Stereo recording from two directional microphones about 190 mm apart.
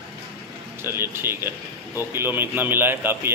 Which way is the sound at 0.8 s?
10° right (ahead or behind).